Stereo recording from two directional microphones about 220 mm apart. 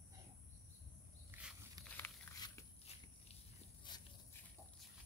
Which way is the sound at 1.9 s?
10° left (ahead or behind).